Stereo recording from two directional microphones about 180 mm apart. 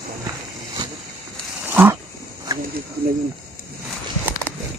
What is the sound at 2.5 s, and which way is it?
Cricket, 20° right (ahead or behind).